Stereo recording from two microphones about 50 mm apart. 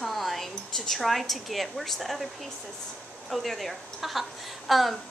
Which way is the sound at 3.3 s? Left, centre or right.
Centre.